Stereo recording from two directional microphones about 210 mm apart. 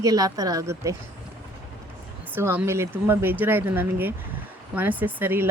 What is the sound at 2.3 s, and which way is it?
Speech, 10° right (ahead or behind).